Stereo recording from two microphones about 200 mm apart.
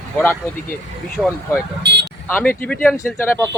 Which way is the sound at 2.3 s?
10° left (ahead or behind).